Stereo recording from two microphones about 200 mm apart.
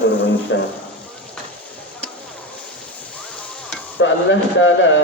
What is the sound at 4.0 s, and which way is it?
A man's voice, 70° left (ahead or behind).